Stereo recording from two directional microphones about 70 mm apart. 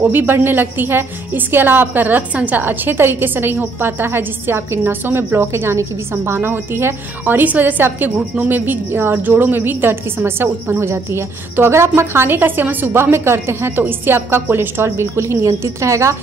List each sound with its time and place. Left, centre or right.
0.0 s a woman's voice: right